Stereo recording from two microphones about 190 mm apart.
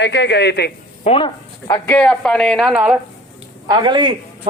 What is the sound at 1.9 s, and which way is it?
Speech, 5° left (ahead or behind).